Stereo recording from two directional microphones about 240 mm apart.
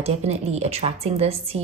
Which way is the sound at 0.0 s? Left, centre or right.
Right.